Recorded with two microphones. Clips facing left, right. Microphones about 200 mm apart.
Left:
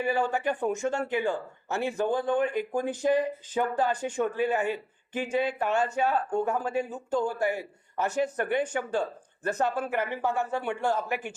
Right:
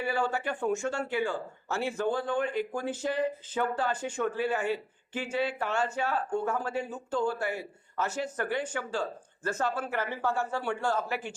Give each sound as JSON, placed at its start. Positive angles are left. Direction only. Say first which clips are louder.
{"t": 0.0, "sound": "speech", "louder": "left 3 dB", "side_deg": 15}